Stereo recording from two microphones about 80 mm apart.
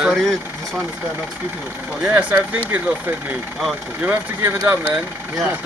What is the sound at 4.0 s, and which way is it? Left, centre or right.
Speech, right.